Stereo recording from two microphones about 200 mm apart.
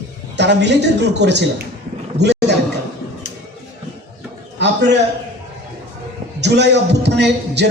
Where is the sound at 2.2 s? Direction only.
60° right (ahead or behind).